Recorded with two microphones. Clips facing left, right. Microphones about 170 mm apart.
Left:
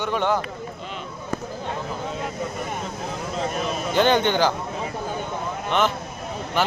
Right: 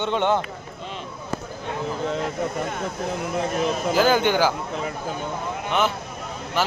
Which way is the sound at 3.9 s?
5° right (ahead or behind).